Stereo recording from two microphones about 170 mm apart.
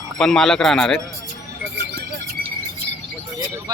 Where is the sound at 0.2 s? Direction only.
5° left (ahead or behind).